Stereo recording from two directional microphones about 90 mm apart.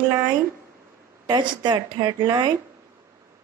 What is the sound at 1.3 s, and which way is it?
A woman's voice, 50° right (ahead or behind).